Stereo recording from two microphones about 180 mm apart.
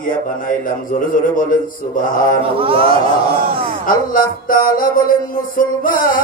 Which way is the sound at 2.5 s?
30° right (ahead or behind).